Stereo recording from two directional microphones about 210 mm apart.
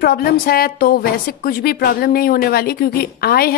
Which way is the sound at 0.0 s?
45° left (ahead or behind).